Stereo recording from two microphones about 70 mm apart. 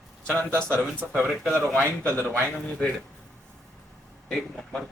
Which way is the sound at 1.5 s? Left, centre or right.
Left.